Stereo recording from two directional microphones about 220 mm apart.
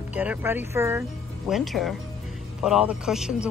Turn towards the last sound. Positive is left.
turn(degrees=0)  # may be behind; listen again after turning